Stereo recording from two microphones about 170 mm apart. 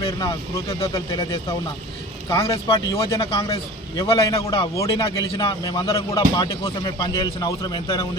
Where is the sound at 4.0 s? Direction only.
20° left (ahead or behind).